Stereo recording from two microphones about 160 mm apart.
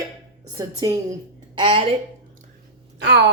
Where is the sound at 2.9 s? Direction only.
90° right.